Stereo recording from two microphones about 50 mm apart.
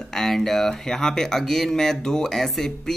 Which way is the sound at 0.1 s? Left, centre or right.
Centre.